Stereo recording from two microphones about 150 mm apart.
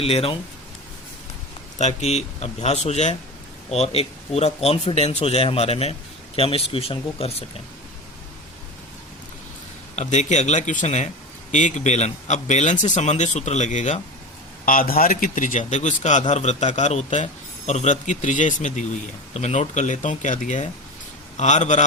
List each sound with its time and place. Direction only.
0.0 s speech: 40° left (ahead or behind)
1.8 s a man's voice: 45° left (ahead or behind)
9.9 s a man's voice: 50° left (ahead or behind)
14.6 s a man's voice: 70° left (ahead or behind); by 21.8 s 50° left (ahead or behind)